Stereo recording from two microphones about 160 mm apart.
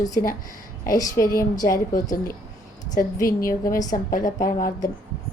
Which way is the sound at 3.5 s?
20° left (ahead or behind).